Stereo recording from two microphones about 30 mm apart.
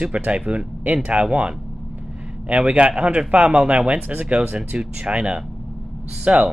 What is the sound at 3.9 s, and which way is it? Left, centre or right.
Speech, right.